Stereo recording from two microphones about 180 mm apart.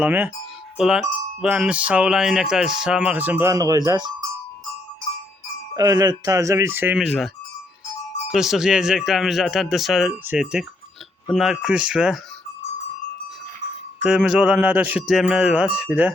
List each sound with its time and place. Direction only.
0.0 s speech: 10° right (ahead or behind)
0.8 s wind chime: 5° right (ahead or behind); by 4.1 s 25° right (ahead or behind)
5.7 s speech: 20° right (ahead or behind)
7.0 s wind chime: centre (ahead or behind)
8.3 s wind chime: centre (ahead or behind)
14.0 s wind chime: 5° right (ahead or behind)